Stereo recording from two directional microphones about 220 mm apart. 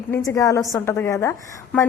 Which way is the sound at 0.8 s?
10° left (ahead or behind).